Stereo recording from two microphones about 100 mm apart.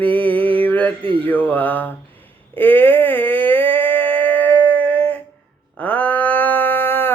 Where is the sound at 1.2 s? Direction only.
15° left (ahead or behind).